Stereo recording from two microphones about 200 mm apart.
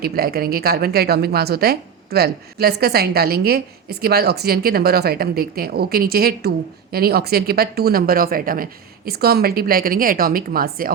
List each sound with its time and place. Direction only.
0.0 s a woman's voice: 50° right (ahead or behind)